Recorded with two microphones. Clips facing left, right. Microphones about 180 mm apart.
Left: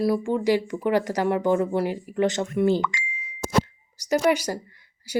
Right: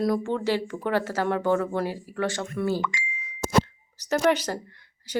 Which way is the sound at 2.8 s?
60° left (ahead or behind).